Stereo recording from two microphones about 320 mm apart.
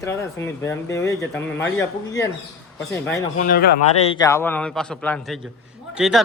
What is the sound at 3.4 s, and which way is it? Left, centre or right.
Speech, left.